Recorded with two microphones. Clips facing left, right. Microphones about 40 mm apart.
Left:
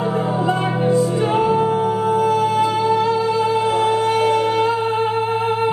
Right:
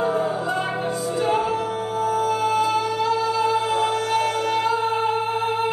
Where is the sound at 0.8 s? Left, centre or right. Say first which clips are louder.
Left 8 dB; left.